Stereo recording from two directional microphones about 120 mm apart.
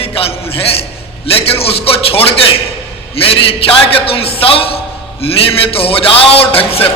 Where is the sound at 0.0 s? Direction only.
55° left (ahead or behind).